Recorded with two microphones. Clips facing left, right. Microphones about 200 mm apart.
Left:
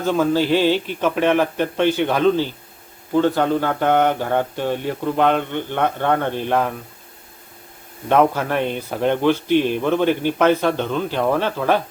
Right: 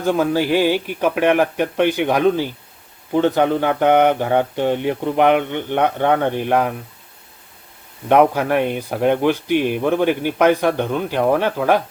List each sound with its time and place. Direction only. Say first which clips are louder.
0.0 s speech: even; 15° right (ahead or behind)
8.1 s speech: right 3 dB; 15° right (ahead or behind)